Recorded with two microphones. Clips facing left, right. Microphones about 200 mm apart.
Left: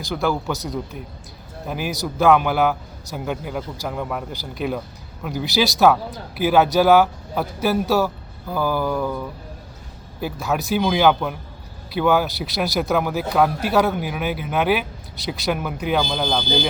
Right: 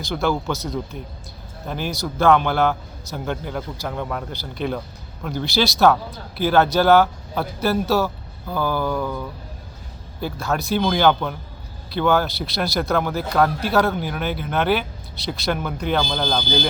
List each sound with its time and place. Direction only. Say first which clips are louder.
0.1 s speech: even; centre (ahead or behind)
0.6 s speech: even; 15° left (ahead or behind)